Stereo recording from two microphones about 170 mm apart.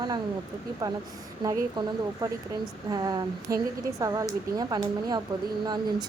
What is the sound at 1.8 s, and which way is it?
Speech, 25° right (ahead or behind).